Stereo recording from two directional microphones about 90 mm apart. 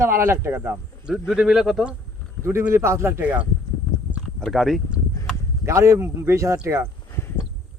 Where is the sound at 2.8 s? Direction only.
30° right (ahead or behind).